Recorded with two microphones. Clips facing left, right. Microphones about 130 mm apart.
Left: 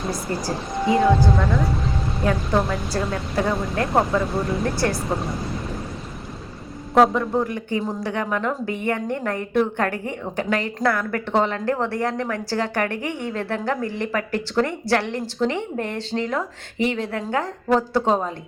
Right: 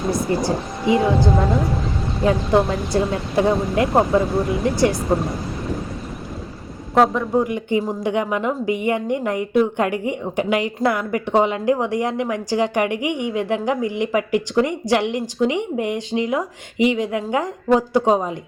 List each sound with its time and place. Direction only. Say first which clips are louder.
0.3 s a woman's voice: right 5 dB; 15° right (ahead or behind)
3.8 s a man's voice: right 2 dB; centre (ahead or behind)
4.6 s speech: right 5 dB; 20° right (ahead or behind)
5.0 s a man's voice: right 5 dB; centre (ahead or behind)
6.9 s a man's voice: right 1 dB; centre (ahead or behind)
7.4 s a woman's voice: right 4 dB; 15° right (ahead or behind)